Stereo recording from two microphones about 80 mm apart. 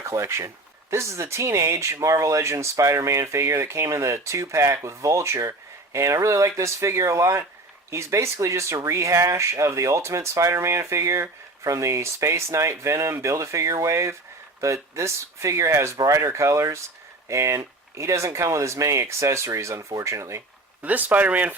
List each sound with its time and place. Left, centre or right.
0.0 s speech: right
20.8 s speech: centre